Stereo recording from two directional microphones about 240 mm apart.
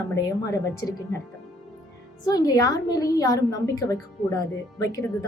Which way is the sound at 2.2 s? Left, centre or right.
Centre.